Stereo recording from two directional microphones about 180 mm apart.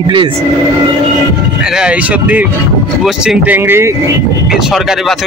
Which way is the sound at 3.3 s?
10° right (ahead or behind).